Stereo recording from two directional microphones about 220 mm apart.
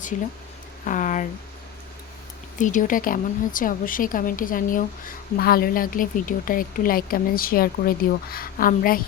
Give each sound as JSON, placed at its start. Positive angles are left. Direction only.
{"t": 0.9, "sound": "a woman's voice", "side_deg": 35}
{"t": 2.6, "sound": "a woman's voice", "side_deg": 35}